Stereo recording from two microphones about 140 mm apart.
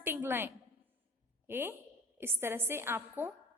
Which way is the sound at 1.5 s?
15° right (ahead or behind).